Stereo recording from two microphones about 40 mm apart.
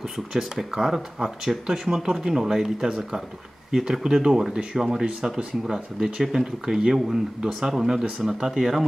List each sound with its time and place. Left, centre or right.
0.3 s speech: centre
8.5 s speech: centre